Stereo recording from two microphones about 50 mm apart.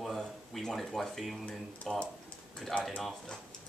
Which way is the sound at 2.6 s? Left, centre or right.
Centre.